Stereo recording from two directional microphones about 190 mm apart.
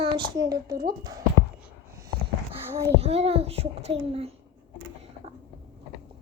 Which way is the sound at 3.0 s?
30° right (ahead or behind).